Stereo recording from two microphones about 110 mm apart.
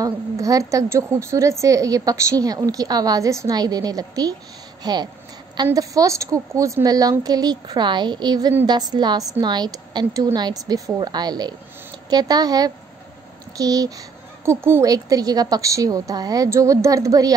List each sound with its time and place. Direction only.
0.0 s a woman's voice: 30° right (ahead or behind)
14.9 s a woman's voice: 35° right (ahead or behind)